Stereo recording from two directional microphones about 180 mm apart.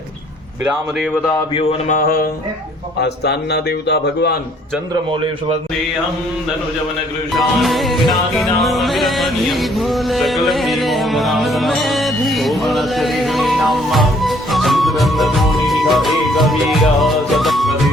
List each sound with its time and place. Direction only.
1.9 s a sound: 55° left (ahead or behind)
3.0 s a man's voice: 65° left (ahead or behind)
7.3 s music: centre (ahead or behind)